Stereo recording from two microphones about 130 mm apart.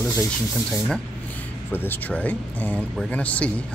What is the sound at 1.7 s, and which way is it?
Speech, 15° left (ahead or behind).